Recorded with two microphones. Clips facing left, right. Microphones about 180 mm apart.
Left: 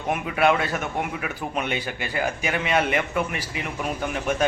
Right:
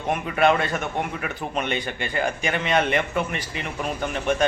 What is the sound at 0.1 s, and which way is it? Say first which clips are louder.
A man's voice: right 1 dB; 5° left (ahead or behind).